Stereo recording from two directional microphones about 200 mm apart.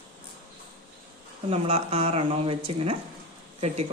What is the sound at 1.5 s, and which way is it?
Speech, 30° right (ahead or behind).